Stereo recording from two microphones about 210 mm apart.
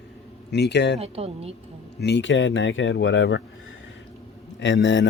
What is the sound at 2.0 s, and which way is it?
Speech, 55° left (ahead or behind).